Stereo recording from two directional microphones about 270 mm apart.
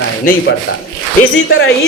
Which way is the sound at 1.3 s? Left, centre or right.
Left.